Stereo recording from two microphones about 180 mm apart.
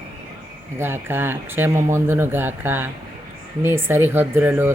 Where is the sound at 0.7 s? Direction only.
10° right (ahead or behind).